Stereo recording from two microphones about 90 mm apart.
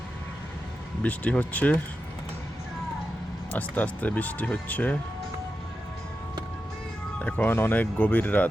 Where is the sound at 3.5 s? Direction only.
20° left (ahead or behind).